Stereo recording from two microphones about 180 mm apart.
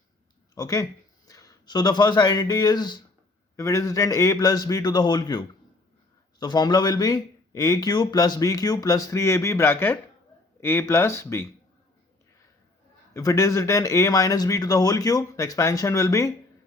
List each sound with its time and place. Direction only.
0.5 s speech: 20° left (ahead or behind)
13.1 s speech: 15° left (ahead or behind)